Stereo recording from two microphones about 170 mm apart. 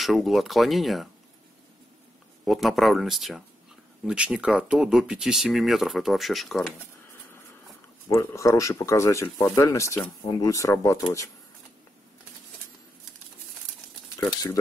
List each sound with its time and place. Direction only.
0.0 s speech: centre (ahead or behind)
2.4 s speech: centre (ahead or behind)
8.1 s speech: 15° left (ahead or behind)